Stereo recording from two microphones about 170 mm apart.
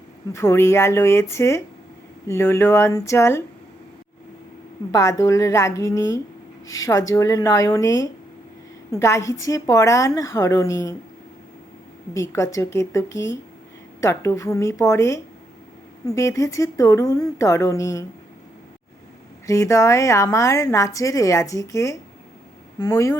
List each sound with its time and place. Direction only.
0.3 s a woman's voice: 15° left (ahead or behind)
4.9 s a woman's voice: 20° left (ahead or behind)
12.1 s a woman's voice: 15° left (ahead or behind)
19.5 s a woman's voice: 20° left (ahead or behind)